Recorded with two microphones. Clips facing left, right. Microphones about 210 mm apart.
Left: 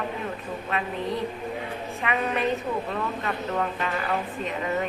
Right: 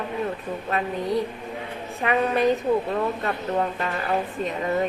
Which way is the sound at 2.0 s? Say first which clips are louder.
Right 5 dB; 40° right (ahead or behind).